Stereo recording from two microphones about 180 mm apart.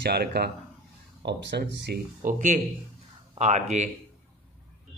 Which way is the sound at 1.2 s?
75° right (ahead or behind).